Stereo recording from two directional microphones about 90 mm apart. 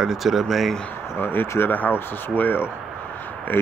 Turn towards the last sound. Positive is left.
turn(degrees=25)  # may be behind; listen again after turning